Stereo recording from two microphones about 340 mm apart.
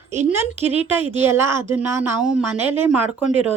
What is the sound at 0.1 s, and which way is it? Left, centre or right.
A woman's voice, centre.